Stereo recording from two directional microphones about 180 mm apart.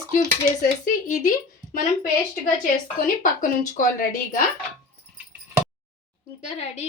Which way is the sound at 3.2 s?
50° left (ahead or behind).